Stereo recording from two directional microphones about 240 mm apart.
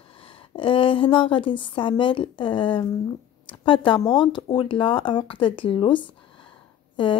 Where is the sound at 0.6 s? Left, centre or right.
Left.